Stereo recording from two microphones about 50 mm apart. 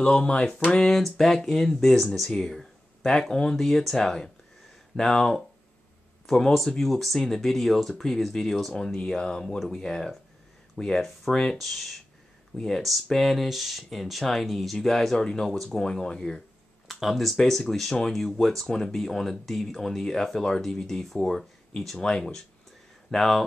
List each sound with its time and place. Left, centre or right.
0.0 s a sound: centre
0.7 s speech: centre
15.5 s speech: centre
15.8 s speech: centre
16.8 s speech: centre